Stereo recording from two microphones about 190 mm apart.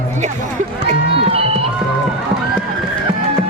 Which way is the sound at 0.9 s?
30° right (ahead or behind).